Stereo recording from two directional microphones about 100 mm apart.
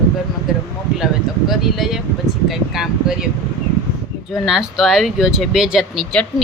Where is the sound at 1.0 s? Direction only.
5° right (ahead or behind).